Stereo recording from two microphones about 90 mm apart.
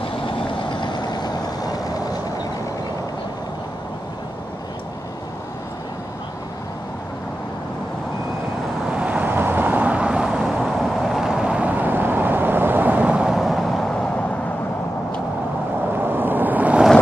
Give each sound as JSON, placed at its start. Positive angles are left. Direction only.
{"t": 0.7, "sound": "vehicle", "side_deg": 55}
{"t": 8.9, "sound": "vehicle", "side_deg": -15}
{"t": 16.0, "sound": "waves", "side_deg": -20}